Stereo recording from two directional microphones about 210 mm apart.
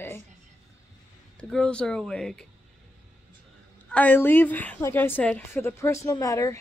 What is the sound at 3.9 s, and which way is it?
A woman's voice, 5° left (ahead or behind).